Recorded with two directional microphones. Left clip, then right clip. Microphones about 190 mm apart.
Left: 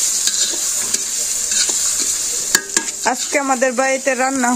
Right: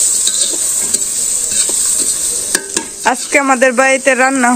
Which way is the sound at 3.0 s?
5° left (ahead or behind).